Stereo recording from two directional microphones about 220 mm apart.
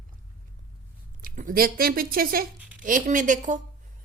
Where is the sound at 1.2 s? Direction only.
40° right (ahead or behind).